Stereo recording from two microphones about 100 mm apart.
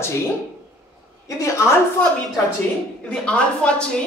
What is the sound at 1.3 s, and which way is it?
Speech, 30° left (ahead or behind).